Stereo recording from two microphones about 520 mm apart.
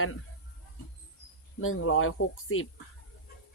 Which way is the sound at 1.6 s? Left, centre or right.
Left.